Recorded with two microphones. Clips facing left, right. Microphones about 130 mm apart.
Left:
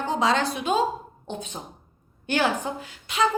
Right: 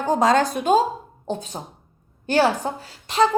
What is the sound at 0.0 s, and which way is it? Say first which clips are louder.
Speech: right 5 dB; 45° right (ahead or behind).